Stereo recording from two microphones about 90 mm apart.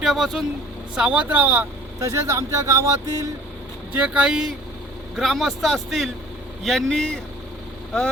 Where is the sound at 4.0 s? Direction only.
10° right (ahead or behind).